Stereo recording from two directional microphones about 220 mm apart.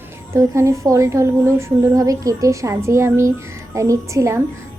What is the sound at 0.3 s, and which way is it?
Speech, 15° right (ahead or behind).